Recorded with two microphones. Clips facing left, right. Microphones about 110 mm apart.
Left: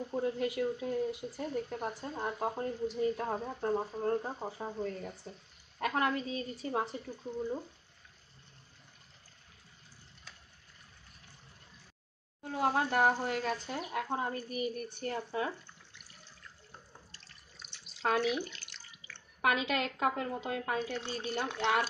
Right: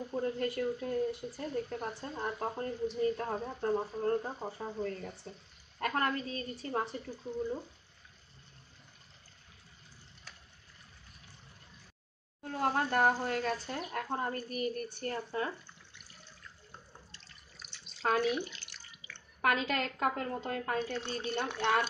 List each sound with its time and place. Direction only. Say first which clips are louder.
0.1 s speech: left 1 dB; 10° left (ahead or behind)
12.4 s speech: left 1 dB; 5° left (ahead or behind)
17.8 s drip: even; centre (ahead or behind)
18.4 s speech: even; 15° right (ahead or behind)
19.7 s speech: left 1 dB; 10° left (ahead or behind)